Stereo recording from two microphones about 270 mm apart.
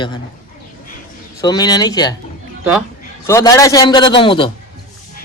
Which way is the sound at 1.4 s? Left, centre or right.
Centre.